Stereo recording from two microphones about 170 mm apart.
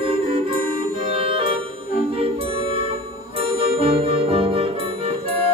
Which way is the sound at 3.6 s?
35° right (ahead or behind).